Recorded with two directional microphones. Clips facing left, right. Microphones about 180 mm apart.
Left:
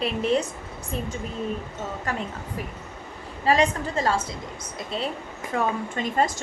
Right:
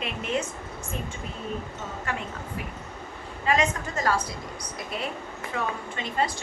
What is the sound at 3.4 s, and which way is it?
Speech, 35° left (ahead or behind).